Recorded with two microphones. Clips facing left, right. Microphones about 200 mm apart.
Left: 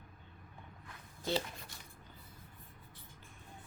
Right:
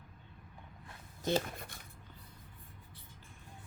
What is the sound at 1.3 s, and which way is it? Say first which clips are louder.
Speech: right 3 dB; 55° right (ahead or behind).